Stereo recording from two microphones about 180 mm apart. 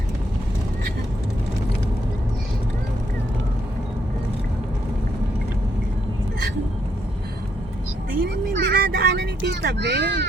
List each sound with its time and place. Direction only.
8.2 s vehicle: 55° right (ahead or behind)